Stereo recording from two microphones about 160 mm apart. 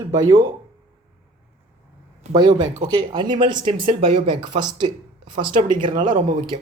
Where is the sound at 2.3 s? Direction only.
25° right (ahead or behind).